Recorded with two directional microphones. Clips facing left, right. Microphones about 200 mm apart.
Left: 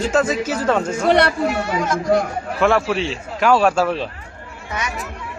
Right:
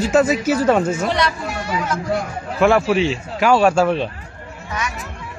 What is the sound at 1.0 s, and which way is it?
Speech, 60° left (ahead or behind).